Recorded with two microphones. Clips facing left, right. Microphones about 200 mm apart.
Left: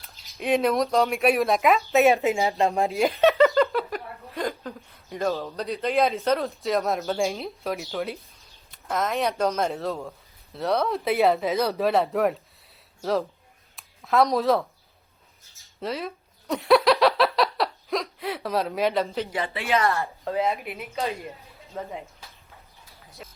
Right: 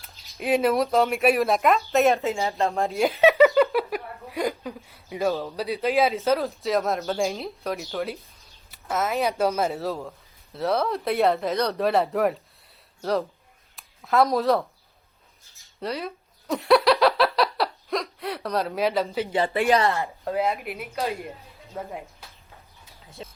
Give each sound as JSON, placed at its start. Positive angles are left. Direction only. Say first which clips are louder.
{"t": 0.0, "sound": "speech", "louder": "even", "side_deg": 0}
{"t": 2.1, "sound": "speech", "louder": "left 2 dB", "side_deg": 15}
{"t": 2.8, "sound": "speech", "louder": "right 2 dB", "side_deg": 0}
{"t": 13.7, "sound": "a sound", "louder": "even", "side_deg": 0}
{"t": 15.8, "sound": "a sound", "louder": "even", "side_deg": 0}
{"t": 19.5, "sound": "speech", "louder": "right 4 dB", "side_deg": -45}
{"t": 19.8, "sound": "speech", "louder": "right 1 dB", "side_deg": -15}
{"t": 20.2, "sound": "speech", "louder": "even", "side_deg": 0}
{"t": 23.0, "sound": "a sound", "louder": "right 4 dB", "side_deg": -25}